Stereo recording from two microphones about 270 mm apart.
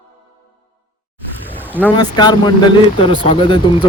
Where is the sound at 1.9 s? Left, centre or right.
Centre.